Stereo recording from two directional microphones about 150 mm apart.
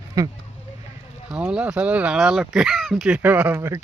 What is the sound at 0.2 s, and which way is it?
Speech, 20° right (ahead or behind).